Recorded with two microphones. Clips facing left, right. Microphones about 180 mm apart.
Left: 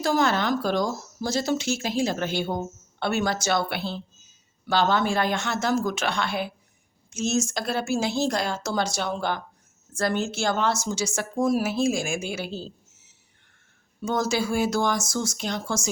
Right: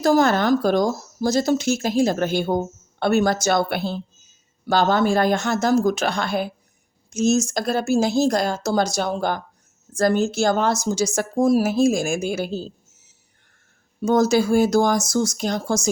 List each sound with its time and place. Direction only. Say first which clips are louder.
0.0 s speech: right 6 dB; 45° right (ahead or behind)
14.0 s speech: right 8 dB; 40° right (ahead or behind)